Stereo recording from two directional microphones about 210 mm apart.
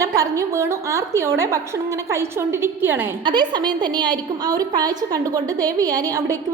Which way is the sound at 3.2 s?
20° right (ahead or behind).